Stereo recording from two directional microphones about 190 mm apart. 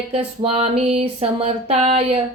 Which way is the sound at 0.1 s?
30° right (ahead or behind).